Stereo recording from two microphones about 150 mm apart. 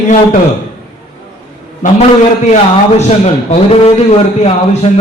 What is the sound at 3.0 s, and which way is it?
A man's voice, 45° left (ahead or behind).